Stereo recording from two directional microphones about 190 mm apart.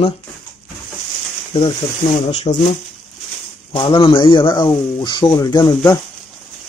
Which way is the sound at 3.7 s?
25° left (ahead or behind).